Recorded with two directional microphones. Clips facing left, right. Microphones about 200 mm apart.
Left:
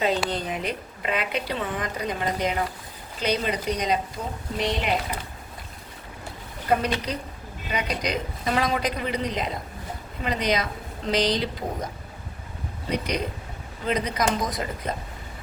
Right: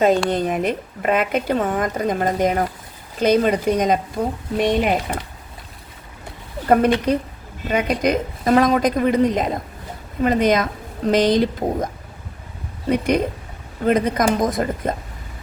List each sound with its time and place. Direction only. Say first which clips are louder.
0.3 s a woman's voice: right 8 dB; 50° right (ahead or behind)
6.7 s a woman's voice: right 9 dB; 50° right (ahead or behind)
12.9 s a woman's voice: right 9 dB; 50° right (ahead or behind)